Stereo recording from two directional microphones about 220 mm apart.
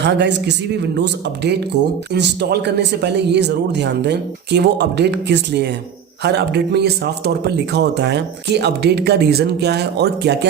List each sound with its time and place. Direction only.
0.0 s speech: 50° right (ahead or behind)